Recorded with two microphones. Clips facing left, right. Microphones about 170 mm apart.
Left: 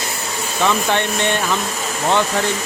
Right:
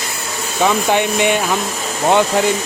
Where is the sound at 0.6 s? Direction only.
15° right (ahead or behind).